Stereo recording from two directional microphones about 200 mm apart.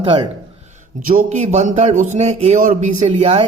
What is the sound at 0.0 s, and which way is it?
Speech, 25° right (ahead or behind).